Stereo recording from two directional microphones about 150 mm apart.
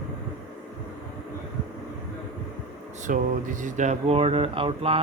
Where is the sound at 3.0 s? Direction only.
60° right (ahead or behind); by 5.0 s 40° right (ahead or behind).